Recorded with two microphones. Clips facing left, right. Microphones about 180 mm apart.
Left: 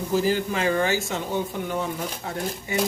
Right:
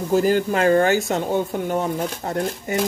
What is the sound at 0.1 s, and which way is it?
Speech, 50° right (ahead or behind).